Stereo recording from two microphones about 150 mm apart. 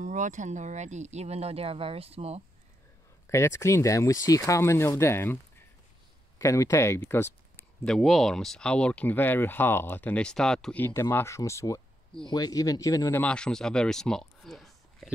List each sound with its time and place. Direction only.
0.0 s speech: 55° right (ahead or behind)
3.3 s speech: 20° left (ahead or behind)
7.8 s speech: centre (ahead or behind)
10.8 s speech: 15° left (ahead or behind)
13.2 s speech: 5° left (ahead or behind)